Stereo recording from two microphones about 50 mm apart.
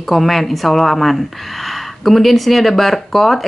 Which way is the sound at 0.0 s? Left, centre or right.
Centre.